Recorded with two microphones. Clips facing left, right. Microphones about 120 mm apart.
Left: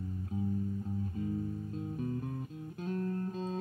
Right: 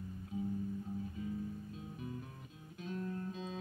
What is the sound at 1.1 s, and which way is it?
Music, 45° left (ahead or behind).